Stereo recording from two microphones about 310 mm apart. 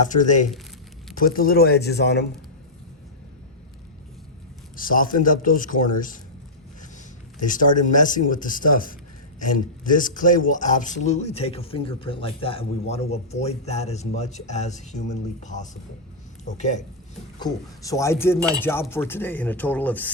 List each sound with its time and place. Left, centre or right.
0.1 s a man's voice: left
4.8 s a man's voice: left
7.3 s a man's voice: left
17.4 s a man's voice: centre